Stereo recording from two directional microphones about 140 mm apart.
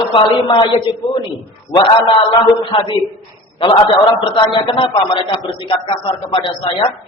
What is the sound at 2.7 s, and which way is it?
Speech, 40° left (ahead or behind).